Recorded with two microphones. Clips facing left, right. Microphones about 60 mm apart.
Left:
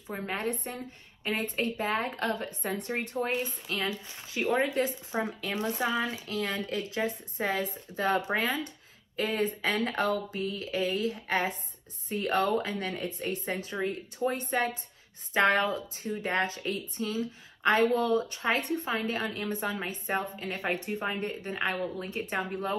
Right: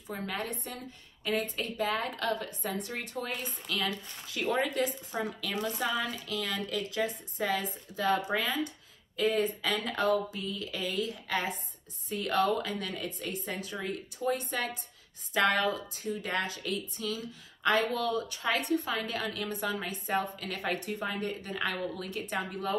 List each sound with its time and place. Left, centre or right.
0.3 s a woman's voice: left